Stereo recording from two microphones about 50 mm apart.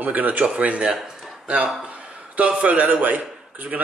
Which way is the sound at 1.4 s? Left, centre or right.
Right.